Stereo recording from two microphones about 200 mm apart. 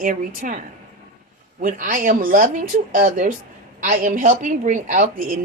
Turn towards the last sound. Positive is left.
turn(degrees=-45)  # may be behind; listen again after turning